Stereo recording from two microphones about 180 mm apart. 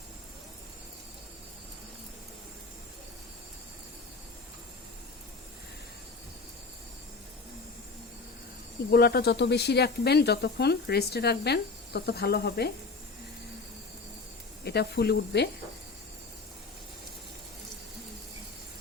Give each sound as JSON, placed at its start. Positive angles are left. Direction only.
{"t": 8.9, "sound": "speech", "side_deg": 60}
{"t": 14.6, "sound": "speech", "side_deg": 65}